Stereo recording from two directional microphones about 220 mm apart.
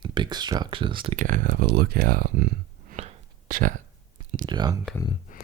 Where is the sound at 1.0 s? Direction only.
35° right (ahead or behind).